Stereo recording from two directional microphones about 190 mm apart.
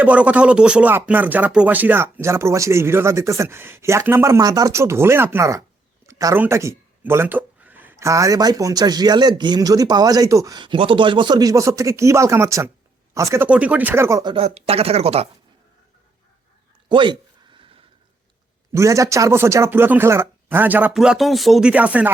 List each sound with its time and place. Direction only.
0.0 s speech: 5° right (ahead or behind)
14.3 s speech: 30° right (ahead or behind)
16.9 s a sound: 25° right (ahead or behind)
18.7 s speech: 15° right (ahead or behind)